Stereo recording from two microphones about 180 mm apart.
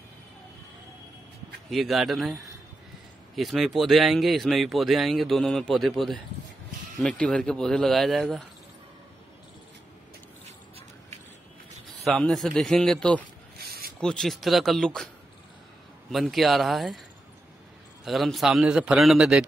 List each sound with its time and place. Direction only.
1.7 s speech: centre (ahead or behind)
12.0 s speech: centre (ahead or behind)
13.6 s a sound: 55° right (ahead or behind)
14.0 s speech: 5° left (ahead or behind)
16.1 s speech: centre (ahead or behind)
18.0 s speech: centre (ahead or behind)